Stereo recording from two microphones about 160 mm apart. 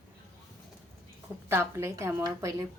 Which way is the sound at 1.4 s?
15° right (ahead or behind).